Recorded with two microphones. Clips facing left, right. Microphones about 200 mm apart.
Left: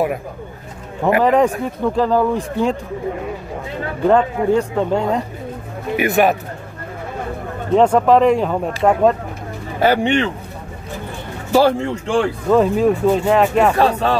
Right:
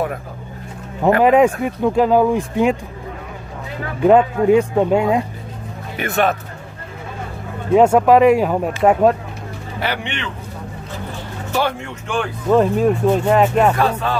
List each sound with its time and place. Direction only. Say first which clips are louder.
1.2 s speech: right 3 dB; 15° right (ahead or behind)
4.0 s speech: right 3 dB; 15° right (ahead or behind)
5.9 s speech: left 3 dB; 15° left (ahead or behind)
7.7 s speech: right 1 dB; 10° right (ahead or behind)
9.8 s speech: left 10 dB; 45° left (ahead or behind)
11.5 s speech: left 7 dB; 35° left (ahead or behind)
12.4 s speech: right 1 dB; centre (ahead or behind)
13.7 s speech: left 3 dB; 35° left (ahead or behind)